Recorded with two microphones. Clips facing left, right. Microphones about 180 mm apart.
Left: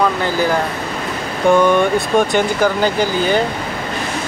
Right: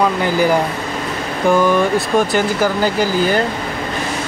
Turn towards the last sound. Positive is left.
turn(degrees=-5)  # may be behind; listen again after turning